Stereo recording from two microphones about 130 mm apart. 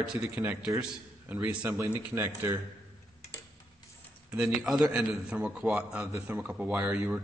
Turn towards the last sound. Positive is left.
turn(degrees=-10)  # may be behind; listen again after turning